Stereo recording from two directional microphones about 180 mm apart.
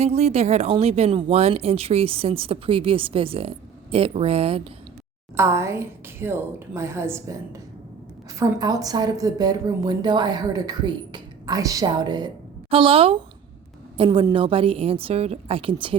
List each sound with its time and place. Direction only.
0.0 s speech: 35° right (ahead or behind)
5.4 s a woman's voice: 15° right (ahead or behind)